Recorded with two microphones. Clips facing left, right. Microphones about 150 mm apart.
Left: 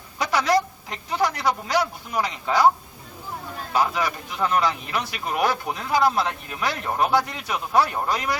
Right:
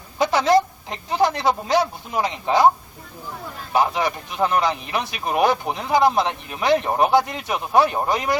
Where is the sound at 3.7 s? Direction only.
25° right (ahead or behind).